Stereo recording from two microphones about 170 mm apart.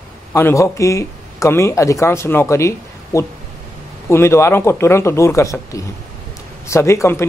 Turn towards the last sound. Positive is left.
turn(degrees=15)  # may be behind; listen again after turning